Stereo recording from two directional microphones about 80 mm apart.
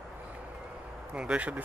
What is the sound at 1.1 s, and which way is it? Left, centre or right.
Speech, centre.